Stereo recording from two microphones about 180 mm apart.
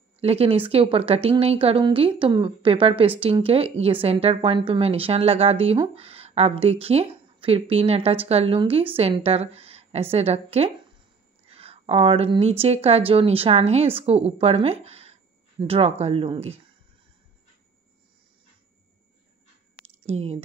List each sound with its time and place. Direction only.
0.2 s a woman's voice: 35° right (ahead or behind)
20.1 s speech: 35° right (ahead or behind)